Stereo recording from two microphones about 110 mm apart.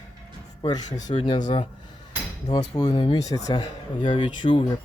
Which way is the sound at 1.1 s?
50° left (ahead or behind).